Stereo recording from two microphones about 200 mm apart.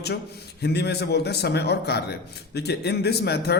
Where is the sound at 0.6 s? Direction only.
55° left (ahead or behind).